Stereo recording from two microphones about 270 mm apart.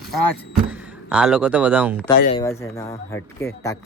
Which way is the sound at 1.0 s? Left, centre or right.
Centre.